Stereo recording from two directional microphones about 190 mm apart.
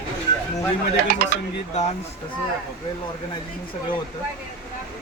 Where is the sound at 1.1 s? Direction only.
55° right (ahead or behind).